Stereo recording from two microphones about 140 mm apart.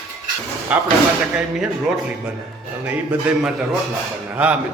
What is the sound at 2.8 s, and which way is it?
A man's voice, 10° right (ahead or behind).